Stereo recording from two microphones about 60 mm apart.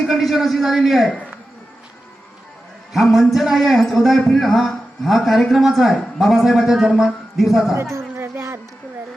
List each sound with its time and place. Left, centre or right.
0.1 s a man's voice: centre
2.9 s a man's voice: centre
7.8 s music: right